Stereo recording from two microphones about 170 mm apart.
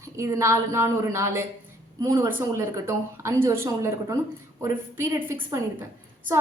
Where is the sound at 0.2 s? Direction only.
15° right (ahead or behind).